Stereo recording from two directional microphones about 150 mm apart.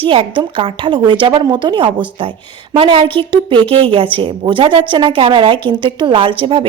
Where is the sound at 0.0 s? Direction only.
35° right (ahead or behind).